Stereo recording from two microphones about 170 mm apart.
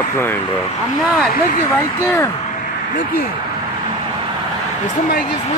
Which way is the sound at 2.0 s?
15° left (ahead or behind).